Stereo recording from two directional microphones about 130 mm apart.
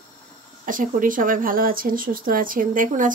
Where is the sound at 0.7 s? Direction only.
90° right.